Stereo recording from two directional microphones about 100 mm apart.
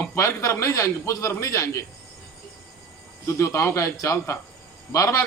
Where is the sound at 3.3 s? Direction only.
30° left (ahead or behind).